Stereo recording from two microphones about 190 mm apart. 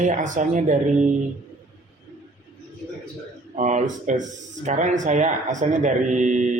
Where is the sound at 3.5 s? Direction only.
40° right (ahead or behind).